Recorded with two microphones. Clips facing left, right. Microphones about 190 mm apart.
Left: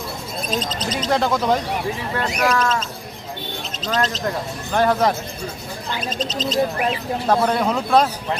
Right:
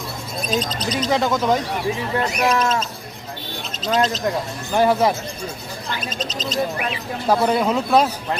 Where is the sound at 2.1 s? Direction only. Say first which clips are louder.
Even; 25° right (ahead or behind).